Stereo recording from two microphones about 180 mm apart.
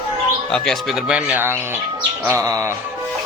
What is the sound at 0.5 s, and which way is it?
Speech, 5° left (ahead or behind).